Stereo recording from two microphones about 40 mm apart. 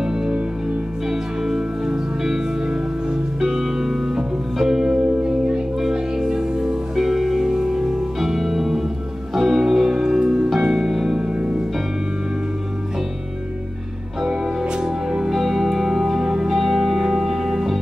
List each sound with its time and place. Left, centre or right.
0.0 s music: centre
5.8 s music: centre
11.2 s music: right
14.6 s music: centre